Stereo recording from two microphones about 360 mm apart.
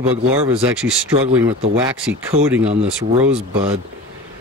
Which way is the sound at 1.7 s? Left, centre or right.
Centre.